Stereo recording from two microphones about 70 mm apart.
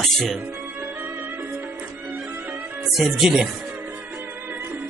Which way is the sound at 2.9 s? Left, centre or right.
Centre.